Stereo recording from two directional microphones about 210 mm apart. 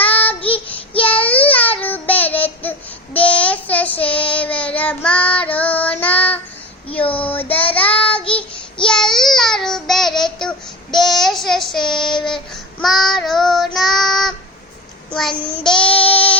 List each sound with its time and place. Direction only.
0.0 s child singing: 5° left (ahead or behind)
7.0 s child singing: 25° left (ahead or behind)
7.3 s child singing: 10° left (ahead or behind)
15.6 s child singing: 5° left (ahead or behind)